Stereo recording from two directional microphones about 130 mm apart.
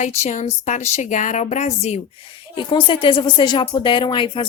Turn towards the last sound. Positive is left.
turn(degrees=35)  # may be behind; listen again after turning